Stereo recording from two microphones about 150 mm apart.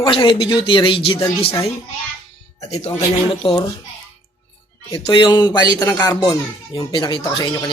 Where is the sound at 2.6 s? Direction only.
45° left (ahead or behind).